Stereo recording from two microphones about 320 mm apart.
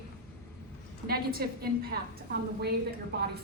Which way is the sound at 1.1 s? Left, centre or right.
Right.